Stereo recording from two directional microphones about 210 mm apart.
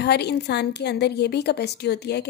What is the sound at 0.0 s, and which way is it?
A woman's voice, 50° left (ahead or behind).